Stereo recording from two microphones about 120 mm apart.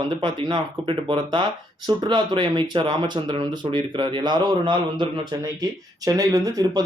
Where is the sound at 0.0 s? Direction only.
40° right (ahead or behind).